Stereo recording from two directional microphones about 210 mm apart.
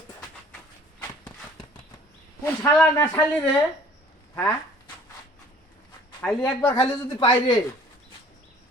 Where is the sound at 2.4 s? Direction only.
10° left (ahead or behind).